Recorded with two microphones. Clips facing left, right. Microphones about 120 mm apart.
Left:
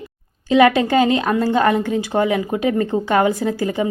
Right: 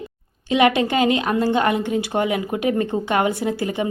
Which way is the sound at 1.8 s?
20° right (ahead or behind).